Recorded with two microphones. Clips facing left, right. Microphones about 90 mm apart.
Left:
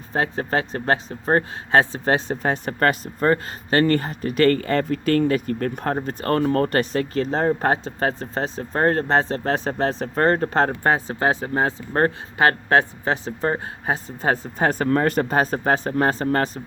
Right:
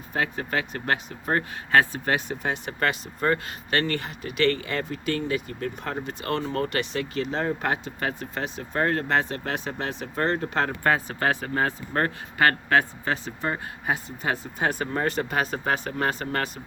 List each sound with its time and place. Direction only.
0.1 s speech: 35° left (ahead or behind)